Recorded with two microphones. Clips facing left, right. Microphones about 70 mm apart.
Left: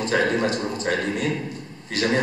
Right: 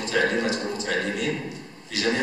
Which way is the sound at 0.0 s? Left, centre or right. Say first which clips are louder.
Left 2 dB; left.